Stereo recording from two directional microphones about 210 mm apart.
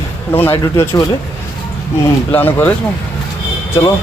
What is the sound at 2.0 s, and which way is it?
Speech, 10° left (ahead or behind).